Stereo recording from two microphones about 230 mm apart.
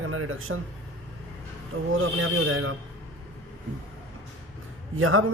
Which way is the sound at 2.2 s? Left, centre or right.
Right.